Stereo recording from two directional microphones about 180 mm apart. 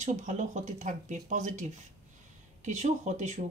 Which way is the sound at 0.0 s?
45° right (ahead or behind).